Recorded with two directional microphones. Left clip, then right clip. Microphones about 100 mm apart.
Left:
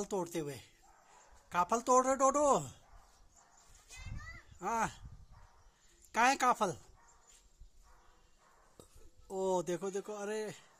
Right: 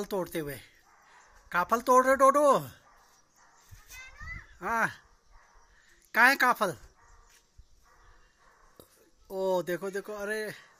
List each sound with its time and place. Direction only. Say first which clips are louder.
0.0 s speech: right 5 dB; 10° left (ahead or behind)
4.6 s speech: right 6 dB; 10° left (ahead or behind)
6.1 s speech: right 7 dB; 15° left (ahead or behind)
9.3 s speech: right 5 dB; 15° left (ahead or behind)